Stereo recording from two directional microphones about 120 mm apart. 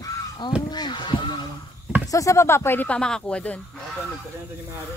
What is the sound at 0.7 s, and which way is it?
Speech, 35° left (ahead or behind).